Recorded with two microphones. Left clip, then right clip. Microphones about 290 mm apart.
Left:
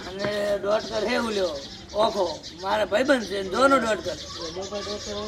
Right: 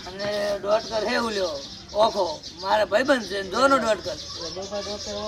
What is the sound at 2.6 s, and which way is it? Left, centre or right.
Speech, centre.